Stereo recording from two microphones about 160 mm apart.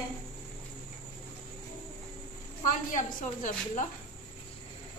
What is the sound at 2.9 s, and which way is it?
Speech, 55° left (ahead or behind).